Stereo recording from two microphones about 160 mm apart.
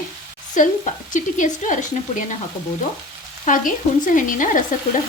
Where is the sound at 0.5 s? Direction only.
50° left (ahead or behind).